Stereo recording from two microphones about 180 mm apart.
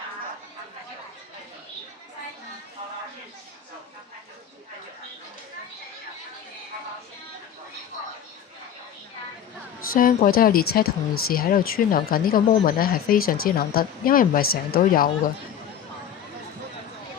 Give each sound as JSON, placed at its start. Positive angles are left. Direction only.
{"t": 9.8, "sound": "a woman's voice", "side_deg": 50}